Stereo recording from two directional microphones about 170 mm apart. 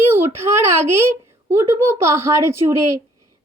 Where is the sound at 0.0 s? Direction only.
15° right (ahead or behind).